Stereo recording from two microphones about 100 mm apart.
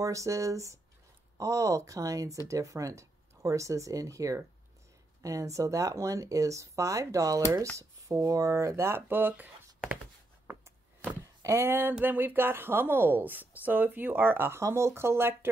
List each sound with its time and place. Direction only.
0.0 s speech: 30° right (ahead or behind)
11.4 s speech: 25° right (ahead or behind)